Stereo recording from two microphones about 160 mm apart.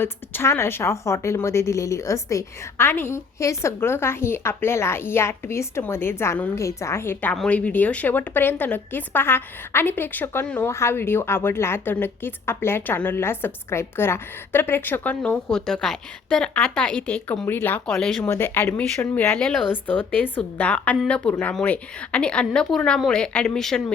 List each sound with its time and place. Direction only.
0.0 s a woman's voice: 15° left (ahead or behind)
18.3 s a woman's voice: 15° left (ahead or behind)